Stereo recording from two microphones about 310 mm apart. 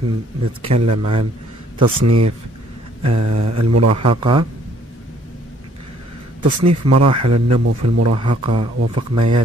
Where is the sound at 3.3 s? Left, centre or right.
Right.